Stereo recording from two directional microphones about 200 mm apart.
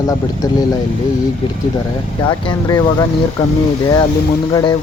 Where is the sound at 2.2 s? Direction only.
20° left (ahead or behind).